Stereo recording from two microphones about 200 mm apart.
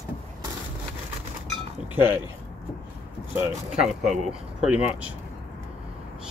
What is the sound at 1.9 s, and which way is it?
Speech, 10° right (ahead or behind).